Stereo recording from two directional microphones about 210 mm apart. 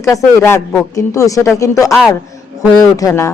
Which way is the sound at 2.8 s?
15° left (ahead or behind).